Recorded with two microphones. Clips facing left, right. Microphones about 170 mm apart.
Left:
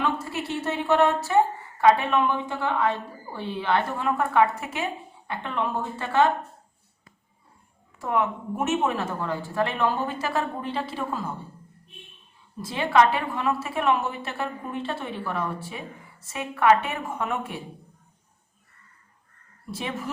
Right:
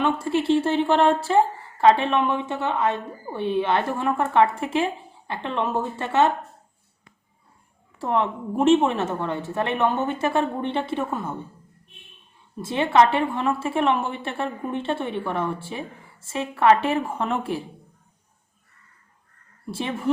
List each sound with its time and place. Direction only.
0.0 s a woman's voice: 25° right (ahead or behind)
7.9 s a woman's voice: 30° right (ahead or behind)
12.6 s a woman's voice: 25° right (ahead or behind)
19.7 s a woman's voice: 30° right (ahead or behind)